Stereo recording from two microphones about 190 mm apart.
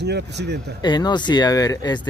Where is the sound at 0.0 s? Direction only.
60° right (ahead or behind).